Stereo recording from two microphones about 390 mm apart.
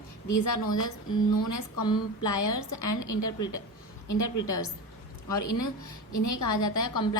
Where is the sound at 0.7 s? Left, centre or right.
Left.